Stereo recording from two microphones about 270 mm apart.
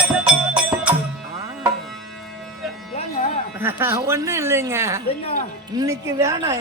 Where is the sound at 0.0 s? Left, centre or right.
Centre.